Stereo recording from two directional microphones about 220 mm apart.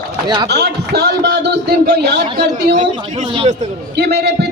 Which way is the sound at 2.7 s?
30° right (ahead or behind).